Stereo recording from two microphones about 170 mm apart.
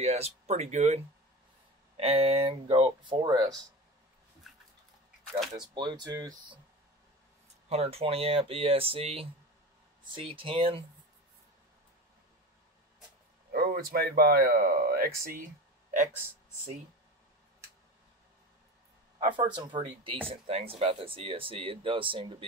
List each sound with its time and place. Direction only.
0.0 s speech: 40° right (ahead or behind); by 3.6 s 20° right (ahead or behind)
5.5 s speech: 25° right (ahead or behind)
7.7 s speech: 35° right (ahead or behind)
13.5 s speech: 65° right (ahead or behind)
19.1 s speech: 30° right (ahead or behind)